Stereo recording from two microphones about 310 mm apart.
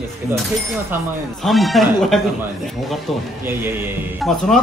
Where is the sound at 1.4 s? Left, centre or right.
Centre.